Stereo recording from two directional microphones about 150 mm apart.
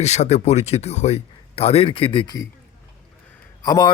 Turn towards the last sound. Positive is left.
turn(degrees=25)  # may be behind; listen again after turning